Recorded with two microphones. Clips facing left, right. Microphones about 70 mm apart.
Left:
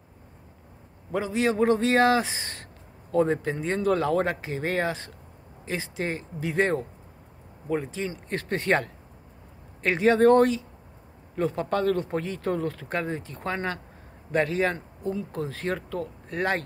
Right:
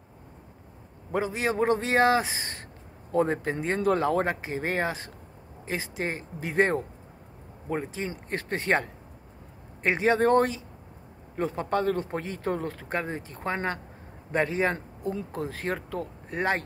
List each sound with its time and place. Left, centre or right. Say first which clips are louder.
1.1 s speech: left 2 dB; right